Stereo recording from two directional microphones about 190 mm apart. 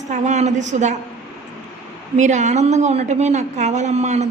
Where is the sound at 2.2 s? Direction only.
40° right (ahead or behind).